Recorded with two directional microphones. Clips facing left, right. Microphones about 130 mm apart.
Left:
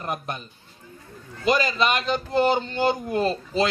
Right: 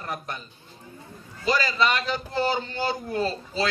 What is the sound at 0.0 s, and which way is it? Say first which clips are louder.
Speech: left 3 dB; 20° left (ahead or behind).